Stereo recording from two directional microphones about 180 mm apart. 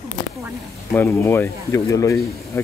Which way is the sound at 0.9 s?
10° left (ahead or behind).